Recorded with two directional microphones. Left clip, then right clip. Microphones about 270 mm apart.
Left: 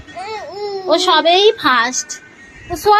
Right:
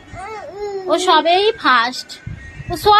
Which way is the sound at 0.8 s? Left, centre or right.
Centre.